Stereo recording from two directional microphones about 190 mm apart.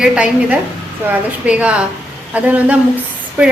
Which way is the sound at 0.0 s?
5° right (ahead or behind).